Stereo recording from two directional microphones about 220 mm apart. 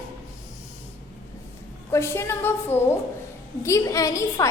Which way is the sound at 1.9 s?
10° left (ahead or behind).